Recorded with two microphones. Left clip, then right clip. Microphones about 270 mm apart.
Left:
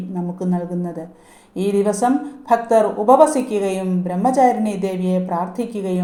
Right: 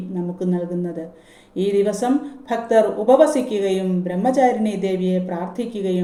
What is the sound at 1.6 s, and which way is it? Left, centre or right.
A woman's voice, centre.